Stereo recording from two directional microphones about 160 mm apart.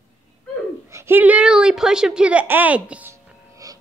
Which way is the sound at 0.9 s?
15° right (ahead or behind).